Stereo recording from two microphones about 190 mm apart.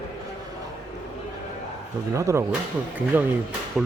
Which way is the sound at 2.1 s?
15° right (ahead or behind).